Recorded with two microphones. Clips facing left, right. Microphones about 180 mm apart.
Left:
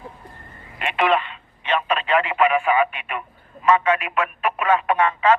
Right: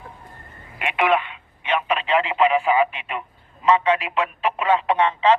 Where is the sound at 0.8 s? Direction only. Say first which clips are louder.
Even; 10° right (ahead or behind).